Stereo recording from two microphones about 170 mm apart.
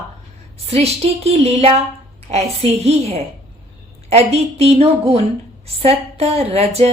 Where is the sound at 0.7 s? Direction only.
40° right (ahead or behind).